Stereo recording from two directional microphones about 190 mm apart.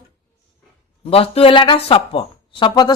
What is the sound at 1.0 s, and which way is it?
A woman's voice, 30° left (ahead or behind).